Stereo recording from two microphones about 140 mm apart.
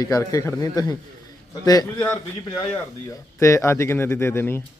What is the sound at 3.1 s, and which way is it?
Speech, 20° left (ahead or behind).